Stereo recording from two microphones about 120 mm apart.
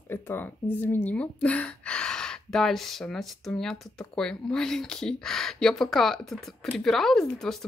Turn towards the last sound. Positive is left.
turn(degrees=5)  # may be behind; listen again after turning